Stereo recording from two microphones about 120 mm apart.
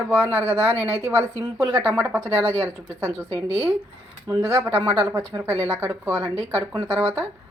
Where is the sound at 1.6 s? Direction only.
30° right (ahead or behind).